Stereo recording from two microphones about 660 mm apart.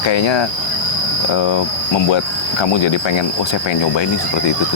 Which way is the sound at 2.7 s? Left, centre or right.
Left.